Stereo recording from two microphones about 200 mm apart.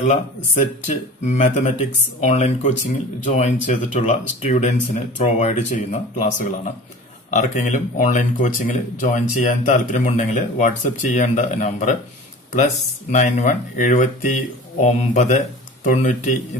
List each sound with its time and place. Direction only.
0.1 s speech: 35° left (ahead or behind)